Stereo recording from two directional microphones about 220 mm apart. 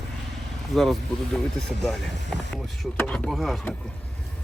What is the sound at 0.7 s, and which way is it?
Speech, centre (ahead or behind).